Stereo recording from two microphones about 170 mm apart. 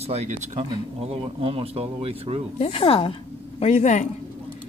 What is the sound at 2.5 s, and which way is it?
A woman's voice, 35° left (ahead or behind).